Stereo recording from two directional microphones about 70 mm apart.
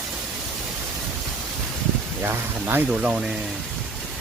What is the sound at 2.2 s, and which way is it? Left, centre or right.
Speech, right.